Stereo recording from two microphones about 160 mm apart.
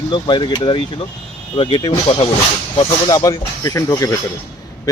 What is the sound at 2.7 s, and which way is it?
Speech, 25° left (ahead or behind).